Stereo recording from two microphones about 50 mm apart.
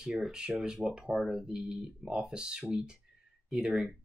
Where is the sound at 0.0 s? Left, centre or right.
Centre.